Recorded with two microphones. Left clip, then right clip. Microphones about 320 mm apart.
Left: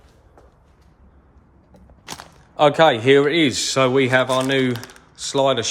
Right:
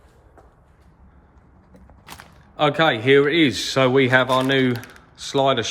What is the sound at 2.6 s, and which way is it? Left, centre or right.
Speech, centre.